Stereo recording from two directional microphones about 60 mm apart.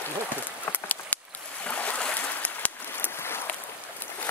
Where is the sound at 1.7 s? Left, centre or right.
Left.